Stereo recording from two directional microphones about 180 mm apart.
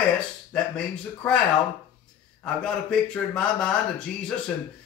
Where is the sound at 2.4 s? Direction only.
5° left (ahead or behind).